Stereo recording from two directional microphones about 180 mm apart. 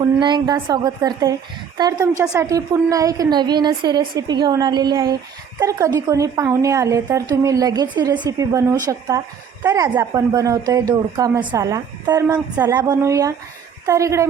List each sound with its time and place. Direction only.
0.0 s a woman's voice: 25° right (ahead or behind)